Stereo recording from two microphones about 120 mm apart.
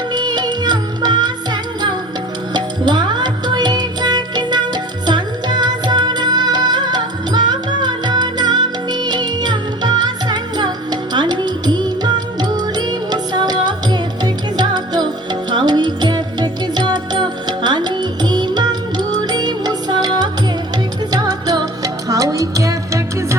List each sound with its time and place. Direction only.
0.1 s music: 35° right (ahead or behind)